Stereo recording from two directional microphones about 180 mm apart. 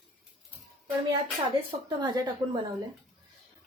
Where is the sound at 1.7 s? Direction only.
25° right (ahead or behind).